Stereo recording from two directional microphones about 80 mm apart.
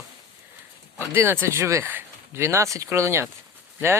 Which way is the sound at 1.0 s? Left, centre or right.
Right.